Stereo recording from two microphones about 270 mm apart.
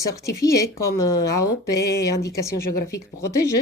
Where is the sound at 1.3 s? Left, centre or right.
Left.